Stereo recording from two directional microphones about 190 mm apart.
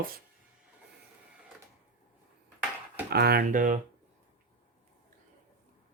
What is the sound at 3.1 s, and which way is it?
Speech, 55° right (ahead or behind).